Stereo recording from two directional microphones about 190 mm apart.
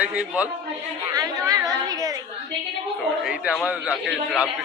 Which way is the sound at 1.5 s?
20° right (ahead or behind).